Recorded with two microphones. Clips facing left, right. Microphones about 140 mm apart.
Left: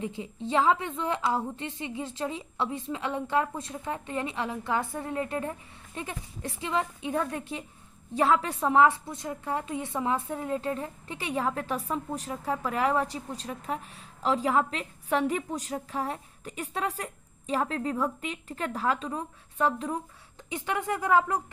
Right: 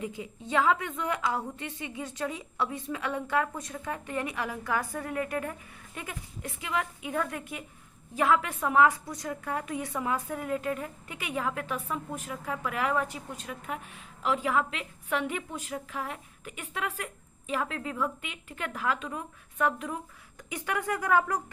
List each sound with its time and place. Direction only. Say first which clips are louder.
0.0 s a woman's voice: left 3 dB; 25° left (ahead or behind)